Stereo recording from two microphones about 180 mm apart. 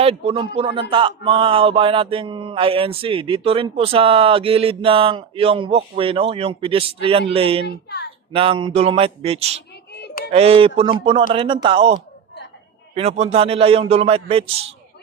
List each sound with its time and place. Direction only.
0.0 s speech: 35° right (ahead or behind)
9.9 s music: 65° left (ahead or behind)
10.3 s speech: 30° right (ahead or behind)